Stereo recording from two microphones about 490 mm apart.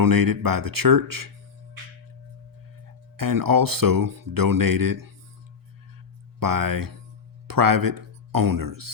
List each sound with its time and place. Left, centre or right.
0.0 s speech: right
2.8 s speech: right
6.4 s speech: right